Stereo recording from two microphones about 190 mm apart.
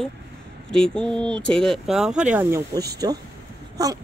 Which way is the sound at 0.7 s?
5° left (ahead or behind).